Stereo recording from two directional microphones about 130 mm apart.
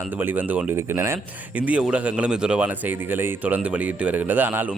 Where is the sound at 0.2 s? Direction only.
15° right (ahead or behind).